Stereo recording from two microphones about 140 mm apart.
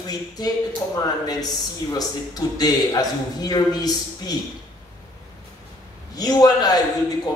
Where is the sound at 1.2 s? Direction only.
30° left (ahead or behind).